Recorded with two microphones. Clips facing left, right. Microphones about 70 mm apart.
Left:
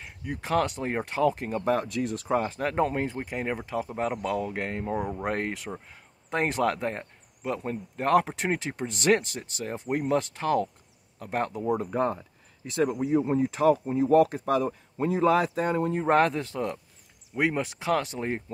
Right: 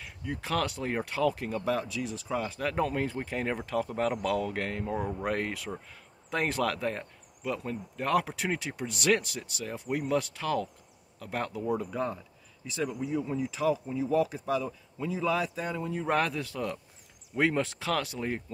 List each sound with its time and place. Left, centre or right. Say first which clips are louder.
0.2 s speech: left 4 dB; left
1.9 s speech: left 6 dB; left
4.9 s speech: left 2 dB; centre
5.3 s speech: left 2 dB; left
11.8 s speech: left 6 dB; left
12.6 s speech: left 6 dB; left
16.0 s speech: left 5 dB; left
17.4 s speech: left 1 dB; centre